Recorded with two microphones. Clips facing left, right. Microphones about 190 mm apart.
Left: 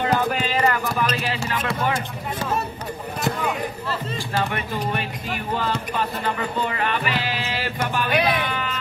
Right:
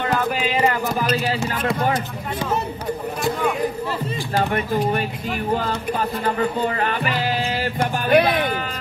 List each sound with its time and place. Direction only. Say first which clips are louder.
0.3 s a sound: right 2 dB; 5° right (ahead or behind)
1.1 s speech: right 4 dB; 35° right (ahead or behind)
5.9 s music: right 3 dB; 40° right (ahead or behind)
8.1 s vehicle: right 7 dB; 55° right (ahead or behind)